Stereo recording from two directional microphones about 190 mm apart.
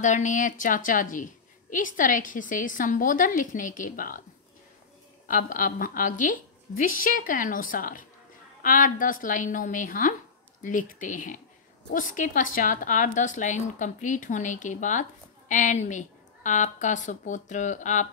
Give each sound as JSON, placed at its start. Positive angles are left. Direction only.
{"t": 0.0, "sound": "a woman's voice", "side_deg": 40}
{"t": 5.3, "sound": "a woman's voice", "side_deg": 45}